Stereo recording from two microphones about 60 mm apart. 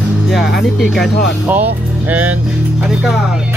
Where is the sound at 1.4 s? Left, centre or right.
Right.